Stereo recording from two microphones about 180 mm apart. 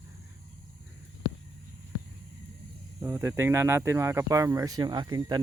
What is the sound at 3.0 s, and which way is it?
Speech, 15° right (ahead or behind).